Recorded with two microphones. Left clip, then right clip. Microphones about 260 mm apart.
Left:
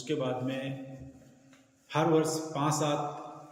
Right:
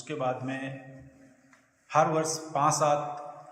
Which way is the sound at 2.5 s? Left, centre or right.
Centre.